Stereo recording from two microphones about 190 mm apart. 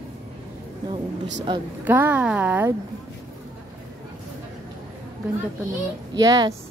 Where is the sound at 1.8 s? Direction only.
10° right (ahead or behind).